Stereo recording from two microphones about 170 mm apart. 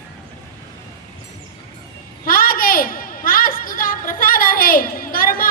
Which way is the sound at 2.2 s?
60° left (ahead or behind).